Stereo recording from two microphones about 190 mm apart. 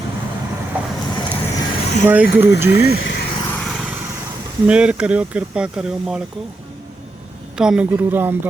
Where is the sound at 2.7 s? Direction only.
60° left (ahead or behind).